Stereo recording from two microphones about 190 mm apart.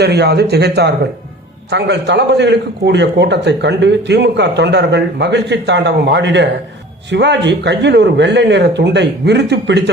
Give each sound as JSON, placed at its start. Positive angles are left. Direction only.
{"t": 0.0, "sound": "a man's voice", "side_deg": -60}